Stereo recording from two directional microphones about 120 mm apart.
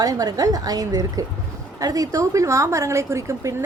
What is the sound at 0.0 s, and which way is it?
A woman's voice, 30° right (ahead or behind).